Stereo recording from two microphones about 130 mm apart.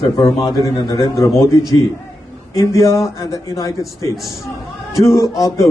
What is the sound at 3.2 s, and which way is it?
Speech, 25° left (ahead or behind).